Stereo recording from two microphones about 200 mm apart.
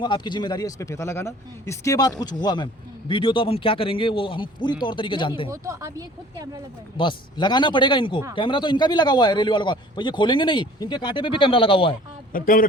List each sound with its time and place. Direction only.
0.0 s a man's voice: 20° left (ahead or behind)
5.5 s speech: 15° right (ahead or behind)
6.9 s a man's voice: 25° left (ahead or behind)
12.3 s speech: 45° left (ahead or behind)